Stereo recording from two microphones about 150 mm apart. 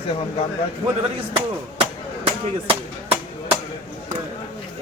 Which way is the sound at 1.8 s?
40° right (ahead or behind).